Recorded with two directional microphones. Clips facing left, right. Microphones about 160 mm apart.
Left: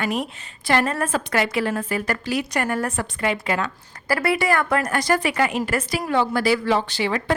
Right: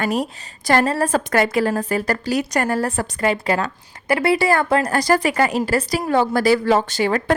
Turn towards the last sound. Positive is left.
turn(degrees=-45)  # may be behind; listen again after turning